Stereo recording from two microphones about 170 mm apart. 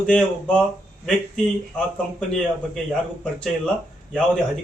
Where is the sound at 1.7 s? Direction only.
5° left (ahead or behind).